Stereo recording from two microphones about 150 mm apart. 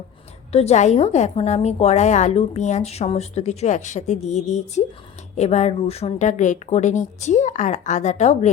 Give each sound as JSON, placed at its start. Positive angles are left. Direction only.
{"t": 0.5, "sound": "a woman's voice", "side_deg": 45}